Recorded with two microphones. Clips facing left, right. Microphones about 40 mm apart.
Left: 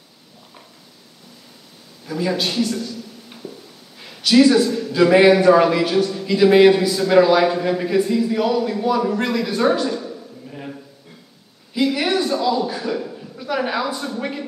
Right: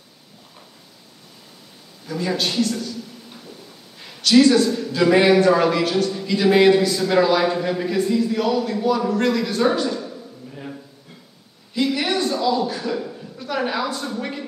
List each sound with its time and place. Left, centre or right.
2.0 s speech: centre
2.5 s speech: centre
4.0 s speech: centre
11.7 s a man's voice: centre